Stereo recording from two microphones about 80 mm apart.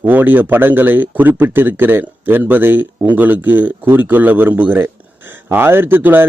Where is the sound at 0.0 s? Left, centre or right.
Right.